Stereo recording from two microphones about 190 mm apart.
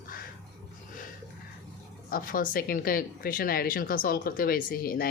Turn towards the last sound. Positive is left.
turn(degrees=50)  # may be behind; listen again after turning